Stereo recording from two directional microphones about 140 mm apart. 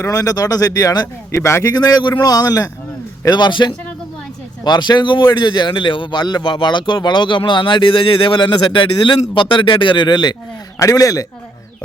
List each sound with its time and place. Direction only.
0.0 s speech: 25° left (ahead or behind)
1.8 s speech: 30° left (ahead or behind)